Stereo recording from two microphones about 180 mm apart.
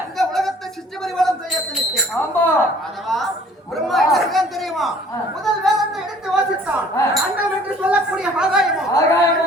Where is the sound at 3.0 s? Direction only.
Centre (ahead or behind).